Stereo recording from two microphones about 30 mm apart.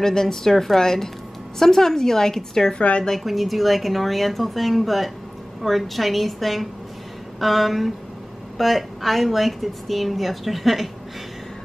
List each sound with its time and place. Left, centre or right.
0.0 s a woman's voice: centre
3.3 s a woman's voice: centre